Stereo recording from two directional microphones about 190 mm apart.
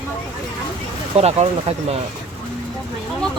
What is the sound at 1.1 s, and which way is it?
Speech, 35° right (ahead or behind).